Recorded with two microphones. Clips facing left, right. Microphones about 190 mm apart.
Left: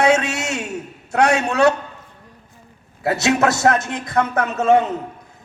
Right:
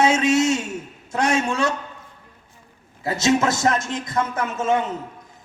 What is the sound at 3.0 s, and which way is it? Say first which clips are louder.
A man's voice: left 2 dB; 65° left (ahead or behind).